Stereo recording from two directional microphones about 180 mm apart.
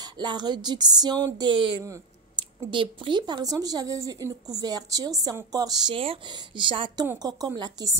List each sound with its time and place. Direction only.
0.0 s speech: 25° right (ahead or behind)